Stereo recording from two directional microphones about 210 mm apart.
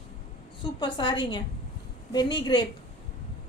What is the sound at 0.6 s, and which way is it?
A woman's voice, 20° left (ahead or behind).